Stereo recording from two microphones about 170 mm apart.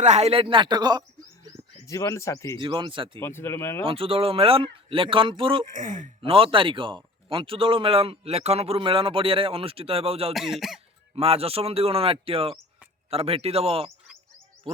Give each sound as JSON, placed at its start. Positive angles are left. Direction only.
{"t": 0.0, "sound": "speech", "side_deg": -40}
{"t": 1.9, "sound": "speech", "side_deg": 20}
{"t": 2.6, "sound": "speech", "side_deg": -30}
{"t": 3.2, "sound": "speech", "side_deg": 15}
{"t": 3.8, "sound": "speech", "side_deg": -35}
{"t": 5.7, "sound": "speech", "side_deg": -50}
{"t": 6.2, "sound": "speech", "side_deg": -30}
{"t": 10.3, "sound": "speech", "side_deg": 0}
{"t": 11.1, "sound": "speech", "side_deg": -35}